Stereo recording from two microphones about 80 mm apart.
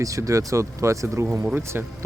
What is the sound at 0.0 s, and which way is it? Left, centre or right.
Speech, right.